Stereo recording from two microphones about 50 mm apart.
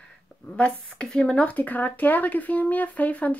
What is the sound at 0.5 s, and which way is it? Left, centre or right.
Speech, left.